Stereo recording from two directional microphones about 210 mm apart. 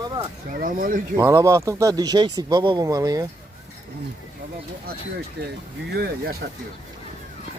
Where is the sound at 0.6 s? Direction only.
40° right (ahead or behind).